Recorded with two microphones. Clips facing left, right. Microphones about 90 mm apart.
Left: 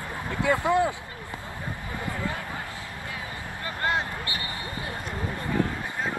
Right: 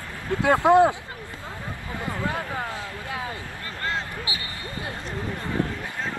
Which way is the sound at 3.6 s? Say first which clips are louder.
Left 3 dB; 20° left (ahead or behind).